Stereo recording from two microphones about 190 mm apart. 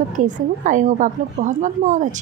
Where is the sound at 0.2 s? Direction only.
40° right (ahead or behind).